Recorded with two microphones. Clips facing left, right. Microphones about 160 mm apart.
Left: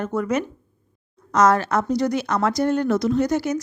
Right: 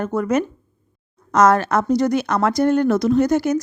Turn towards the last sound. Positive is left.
turn(degrees=-50)  # may be behind; listen again after turning